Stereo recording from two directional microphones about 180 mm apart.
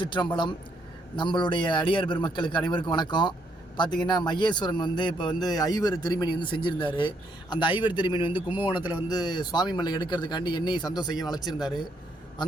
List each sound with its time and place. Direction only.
0.0 s a man's voice: 25° left (ahead or behind)
8.3 s a man's voice: 10° right (ahead or behind)
9.0 s a man's voice: 25° left (ahead or behind)